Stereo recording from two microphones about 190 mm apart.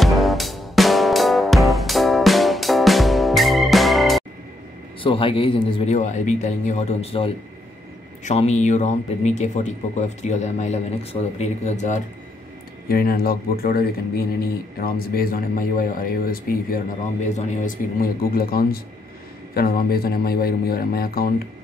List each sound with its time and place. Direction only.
0.0 s music: centre (ahead or behind)
5.0 s speech: 30° left (ahead or behind)
5.9 s speech: 40° left (ahead or behind)
12.8 s speech: 50° left (ahead or behind)